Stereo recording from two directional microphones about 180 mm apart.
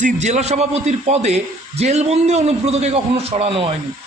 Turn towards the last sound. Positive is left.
turn(degrees=-30)  # may be behind; listen again after turning